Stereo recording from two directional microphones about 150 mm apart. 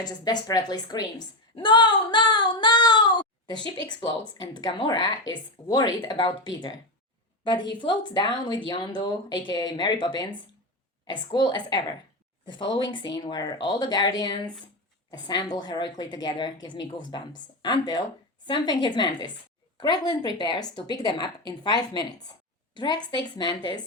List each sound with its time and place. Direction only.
0.0 s a woman's voice: 30° left (ahead or behind)
1.5 s female singing: 30° left (ahead or behind)
4.4 s a woman's voice: 30° left (ahead or behind)